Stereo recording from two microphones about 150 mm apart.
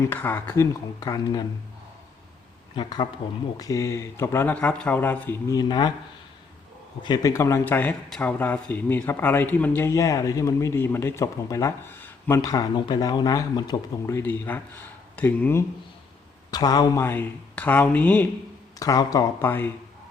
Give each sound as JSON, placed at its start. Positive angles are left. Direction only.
{"t": 0.0, "sound": "speech", "side_deg": 15}
{"t": 2.7, "sound": "speech", "side_deg": 30}
{"t": 7.0, "sound": "speech", "side_deg": 25}
{"t": 14.2, "sound": "speech", "side_deg": 10}
{"t": 16.5, "sound": "speech", "side_deg": 25}
{"t": 18.8, "sound": "speech", "side_deg": 25}